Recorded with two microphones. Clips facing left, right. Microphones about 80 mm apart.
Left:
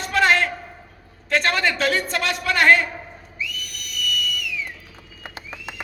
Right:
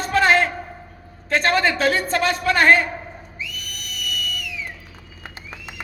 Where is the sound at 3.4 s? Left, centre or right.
Right.